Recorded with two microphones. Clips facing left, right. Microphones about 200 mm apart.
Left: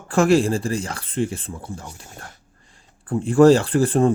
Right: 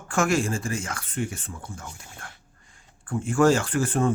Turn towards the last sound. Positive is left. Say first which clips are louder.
# left 6 dB
turn(degrees=35)  # may be behind; listen again after turning